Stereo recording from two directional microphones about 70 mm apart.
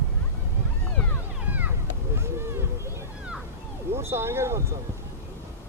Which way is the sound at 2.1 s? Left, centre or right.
Right.